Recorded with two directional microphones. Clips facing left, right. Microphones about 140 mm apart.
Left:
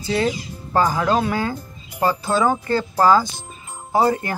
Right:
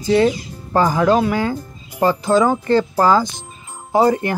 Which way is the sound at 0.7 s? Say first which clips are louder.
Right 4 dB; 10° right (ahead or behind).